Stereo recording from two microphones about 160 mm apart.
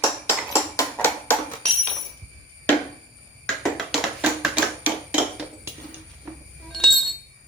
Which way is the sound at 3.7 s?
5° right (ahead or behind).